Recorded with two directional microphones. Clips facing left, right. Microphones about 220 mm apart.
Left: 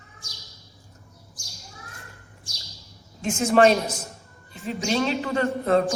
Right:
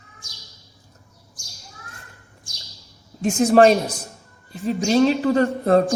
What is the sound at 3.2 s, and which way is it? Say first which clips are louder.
A woman's voice: right 4 dB; 35° right (ahead or behind).